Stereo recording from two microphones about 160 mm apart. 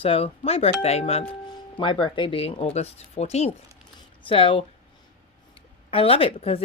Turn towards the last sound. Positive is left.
turn(degrees=35)  # may be behind; listen again after turning